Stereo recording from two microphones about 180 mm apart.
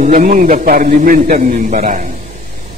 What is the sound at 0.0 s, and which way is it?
A man's voice, 45° right (ahead or behind).